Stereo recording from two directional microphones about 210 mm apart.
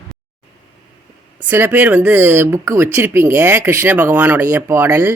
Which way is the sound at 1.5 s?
10° right (ahead or behind).